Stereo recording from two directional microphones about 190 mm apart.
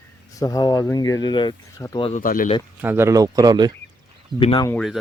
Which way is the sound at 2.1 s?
45° left (ahead or behind).